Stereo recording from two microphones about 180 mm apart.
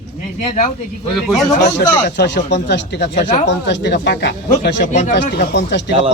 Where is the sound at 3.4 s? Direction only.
75° left (ahead or behind).